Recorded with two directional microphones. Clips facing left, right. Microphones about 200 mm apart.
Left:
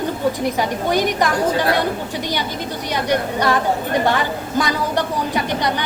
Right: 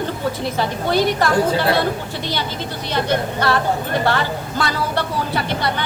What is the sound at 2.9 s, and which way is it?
Speech, 15° left (ahead or behind).